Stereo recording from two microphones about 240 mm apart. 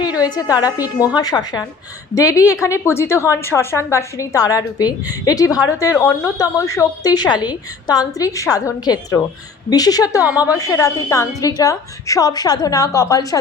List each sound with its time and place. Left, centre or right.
0.0 s a woman's voice: centre
10.2 s a woman's voice: centre
10.5 s a woman's voice: centre